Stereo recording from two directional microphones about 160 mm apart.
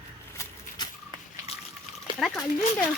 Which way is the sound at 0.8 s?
25° left (ahead or behind).